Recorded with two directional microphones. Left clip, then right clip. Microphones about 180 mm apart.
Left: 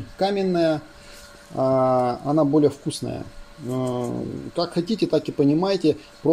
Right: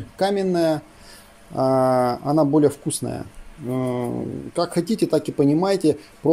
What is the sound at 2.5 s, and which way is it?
Speech, 30° right (ahead or behind).